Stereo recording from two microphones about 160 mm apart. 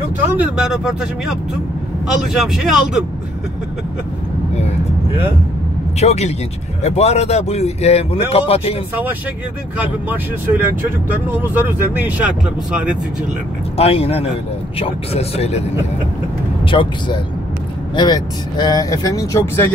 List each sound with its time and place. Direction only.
0.4 s speech: 5° right (ahead or behind)
5.9 s speech: 40° left (ahead or behind)
9.8 s speech: 10° right (ahead or behind)
13.7 s speech: 40° left (ahead or behind)
16.7 s speech: 30° left (ahead or behind)
17.9 s speech: 25° left (ahead or behind)